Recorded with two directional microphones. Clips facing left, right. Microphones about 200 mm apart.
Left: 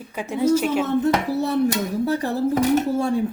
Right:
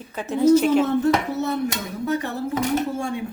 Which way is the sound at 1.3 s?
35° left (ahead or behind).